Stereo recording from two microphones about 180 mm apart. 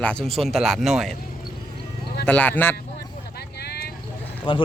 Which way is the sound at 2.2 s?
10° left (ahead or behind).